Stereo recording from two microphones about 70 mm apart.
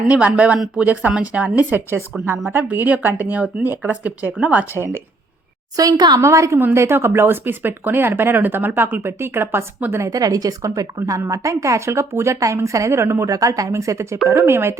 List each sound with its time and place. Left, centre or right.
0.1 s speech: centre
1.7 s speech: right
4.7 s speech: right
5.7 s a woman's voice: right
6.1 s speech: right
6.7 s speech: right
10.1 s a woman's voice: right
13.2 s speech: right